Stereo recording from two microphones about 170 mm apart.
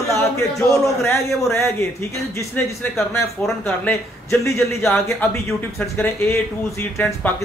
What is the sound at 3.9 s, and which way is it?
Speech, 15° left (ahead or behind).